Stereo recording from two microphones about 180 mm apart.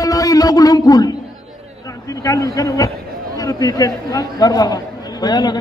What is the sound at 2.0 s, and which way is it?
A man's voice, 20° left (ahead or behind).